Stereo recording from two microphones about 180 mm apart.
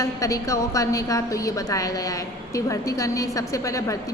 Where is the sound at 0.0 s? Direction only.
15° left (ahead or behind).